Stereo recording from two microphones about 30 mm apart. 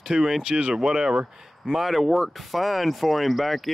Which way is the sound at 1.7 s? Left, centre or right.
Centre.